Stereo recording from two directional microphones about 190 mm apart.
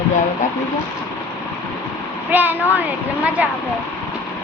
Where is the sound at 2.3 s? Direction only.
10° right (ahead or behind).